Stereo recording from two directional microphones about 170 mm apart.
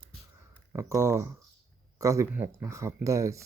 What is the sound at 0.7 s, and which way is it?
Speech, 15° right (ahead or behind).